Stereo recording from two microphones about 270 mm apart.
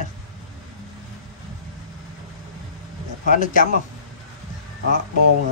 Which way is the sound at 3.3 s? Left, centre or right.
Left.